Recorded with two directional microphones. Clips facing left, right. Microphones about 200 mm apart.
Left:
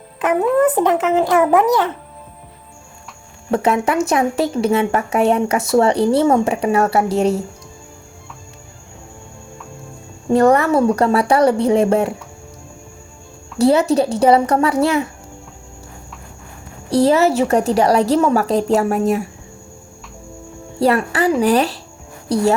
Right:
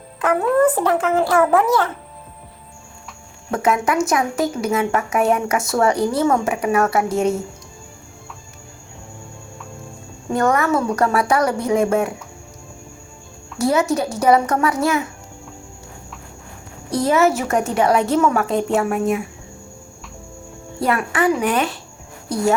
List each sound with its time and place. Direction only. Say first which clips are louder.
0.6 s a child's voice: left 2 dB; 20° left (ahead or behind)
3.5 s a woman's voice: left 2 dB; 30° left (ahead or behind)
10.3 s a woman's voice: left 5 dB; 30° left (ahead or behind)
13.6 s a woman's voice: left 5 dB; 30° left (ahead or behind)
16.9 s a woman's voice: left 3 dB; 35° left (ahead or behind)
20.7 s a woman's voice: left 4 dB; 35° left (ahead or behind)